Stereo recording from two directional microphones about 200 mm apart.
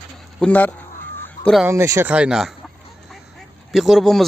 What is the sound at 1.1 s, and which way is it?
Goose, 10° left (ahead or behind).